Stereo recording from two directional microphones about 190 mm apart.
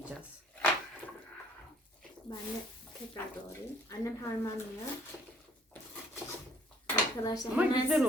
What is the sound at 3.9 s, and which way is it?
Speech, 15° left (ahead or behind).